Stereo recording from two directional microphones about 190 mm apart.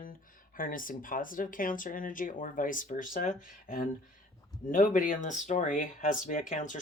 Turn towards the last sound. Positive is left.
turn(degrees=45)  # may be behind; listen again after turning